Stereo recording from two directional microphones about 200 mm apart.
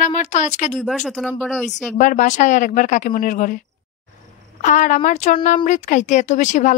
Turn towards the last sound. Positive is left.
turn(degrees=40)  # may be behind; listen again after turning